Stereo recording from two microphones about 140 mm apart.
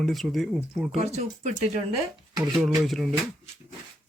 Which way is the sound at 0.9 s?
55° right (ahead or behind).